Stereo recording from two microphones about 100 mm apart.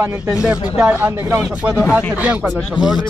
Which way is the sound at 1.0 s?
25° right (ahead or behind).